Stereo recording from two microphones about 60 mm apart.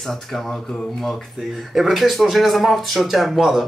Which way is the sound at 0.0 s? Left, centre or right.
Centre.